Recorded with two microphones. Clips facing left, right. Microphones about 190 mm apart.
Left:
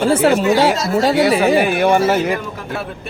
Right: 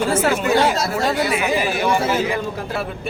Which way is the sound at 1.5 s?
60° left (ahead or behind).